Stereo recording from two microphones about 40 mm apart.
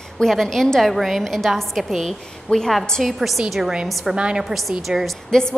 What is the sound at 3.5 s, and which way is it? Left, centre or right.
Speech, centre.